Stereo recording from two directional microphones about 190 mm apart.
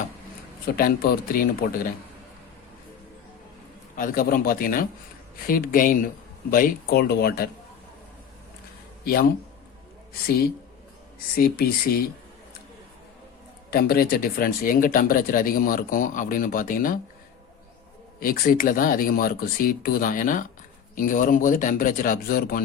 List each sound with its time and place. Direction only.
0.8 s speech: 50° left (ahead or behind)
3.9 s speech: 45° left (ahead or behind)
10.2 s speech: 50° left (ahead or behind)
13.7 s speech: 55° left (ahead or behind)
18.2 s speech: 50° left (ahead or behind)